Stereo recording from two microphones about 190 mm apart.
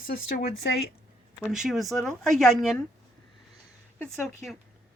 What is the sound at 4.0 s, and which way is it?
Speech, centre (ahead or behind).